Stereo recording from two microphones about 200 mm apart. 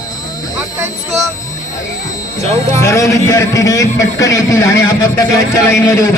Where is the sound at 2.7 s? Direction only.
15° left (ahead or behind).